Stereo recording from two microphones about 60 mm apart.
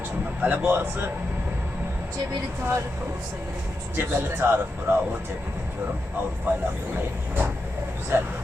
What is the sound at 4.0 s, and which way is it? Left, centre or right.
Speech, right.